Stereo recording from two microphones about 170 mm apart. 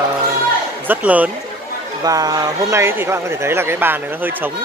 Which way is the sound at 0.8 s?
10° right (ahead or behind).